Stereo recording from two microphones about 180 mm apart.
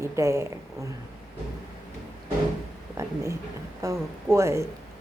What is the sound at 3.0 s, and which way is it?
Speech, 15° right (ahead or behind).